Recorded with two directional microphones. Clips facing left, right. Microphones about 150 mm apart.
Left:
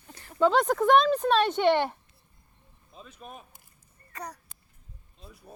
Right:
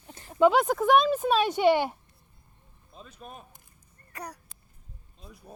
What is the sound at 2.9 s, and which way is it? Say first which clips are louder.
Vehicle: even; centre (ahead or behind).